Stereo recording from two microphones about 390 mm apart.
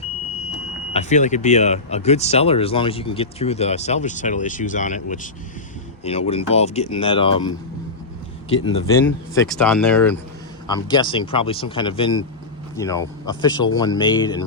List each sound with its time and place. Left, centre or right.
0.9 s speech: centre
8.6 s speech: centre